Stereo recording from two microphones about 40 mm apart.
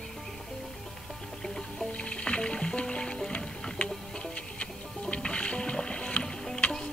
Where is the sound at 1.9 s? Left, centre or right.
Left.